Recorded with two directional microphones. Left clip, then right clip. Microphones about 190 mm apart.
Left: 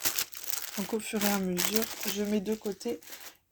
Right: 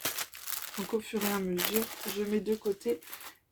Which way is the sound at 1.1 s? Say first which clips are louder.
Left 4 dB; 70° left (ahead or behind).